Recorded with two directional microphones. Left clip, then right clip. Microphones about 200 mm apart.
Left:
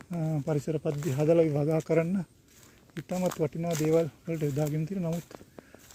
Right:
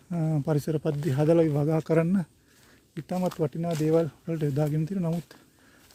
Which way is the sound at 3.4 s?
25° right (ahead or behind).